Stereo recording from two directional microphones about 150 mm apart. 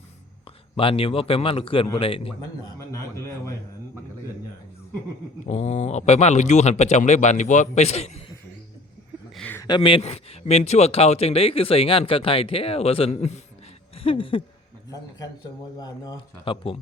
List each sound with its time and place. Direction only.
0.8 s speech: 40° left (ahead or behind)
2.7 s a man's voice: 20° left (ahead or behind)
5.5 s speech: 45° left (ahead or behind)
9.3 s a sound: 5° left (ahead or behind)
9.6 s speech: 30° left (ahead or behind); by 13.4 s 45° left (ahead or behind)
13.9 s a sound: 40° left (ahead or behind)
15.8 s speech: 30° left (ahead or behind)